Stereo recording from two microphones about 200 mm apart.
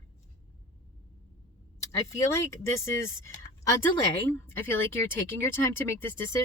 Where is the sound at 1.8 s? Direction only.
15° left (ahead or behind).